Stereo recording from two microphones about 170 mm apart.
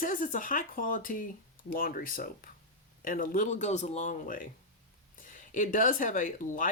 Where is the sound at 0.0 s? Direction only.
50° left (ahead or behind).